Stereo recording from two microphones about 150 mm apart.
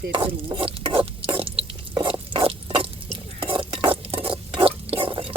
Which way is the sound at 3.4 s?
35° right (ahead or behind).